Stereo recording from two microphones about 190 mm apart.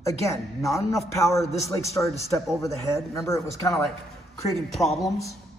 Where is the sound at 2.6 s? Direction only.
15° left (ahead or behind).